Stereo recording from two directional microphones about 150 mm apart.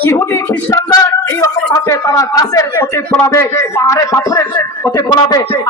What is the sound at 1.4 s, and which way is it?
Speech, 20° left (ahead or behind).